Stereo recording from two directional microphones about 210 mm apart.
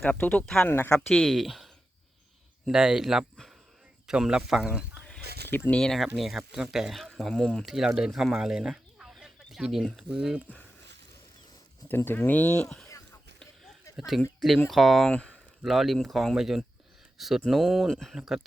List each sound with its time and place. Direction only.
0.0 s speech: 10° left (ahead or behind)
5.2 s a sound: 50° right (ahead or behind)
5.5 s speech: 10° left (ahead or behind)
11.9 s speech: 10° left (ahead or behind)
14.1 s speech: centre (ahead or behind)